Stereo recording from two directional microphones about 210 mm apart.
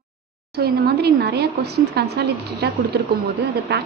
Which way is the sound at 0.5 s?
50° right (ahead or behind).